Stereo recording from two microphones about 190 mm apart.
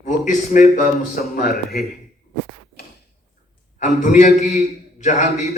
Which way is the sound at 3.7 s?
40° left (ahead or behind).